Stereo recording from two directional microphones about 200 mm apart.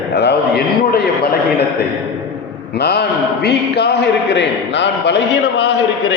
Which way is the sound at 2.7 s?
55° left (ahead or behind).